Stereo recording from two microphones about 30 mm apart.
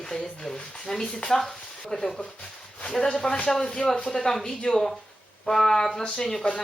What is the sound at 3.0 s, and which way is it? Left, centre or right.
Speech, left.